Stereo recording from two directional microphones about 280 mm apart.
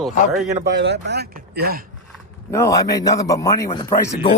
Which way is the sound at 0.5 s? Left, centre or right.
Right.